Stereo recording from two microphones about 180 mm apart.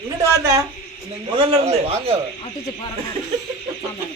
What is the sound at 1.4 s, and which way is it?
Speech, 35° right (ahead or behind).